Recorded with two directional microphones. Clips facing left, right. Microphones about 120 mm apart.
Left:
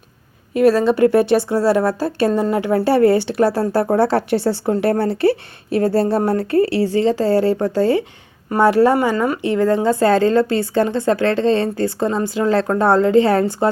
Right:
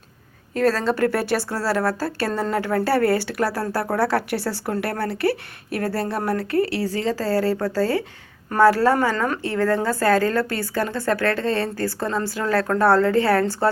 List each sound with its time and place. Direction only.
0.5 s speech: 15° left (ahead or behind)